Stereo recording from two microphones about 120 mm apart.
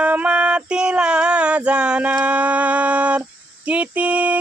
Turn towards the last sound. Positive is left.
turn(degrees=-10)  # may be behind; listen again after turning